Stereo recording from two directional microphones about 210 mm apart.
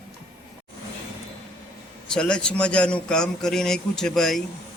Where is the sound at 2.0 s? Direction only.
5° left (ahead or behind).